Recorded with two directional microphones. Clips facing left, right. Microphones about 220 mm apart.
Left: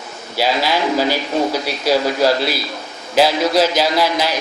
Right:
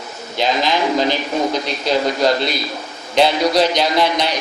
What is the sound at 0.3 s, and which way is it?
A man's voice, 5° left (ahead or behind).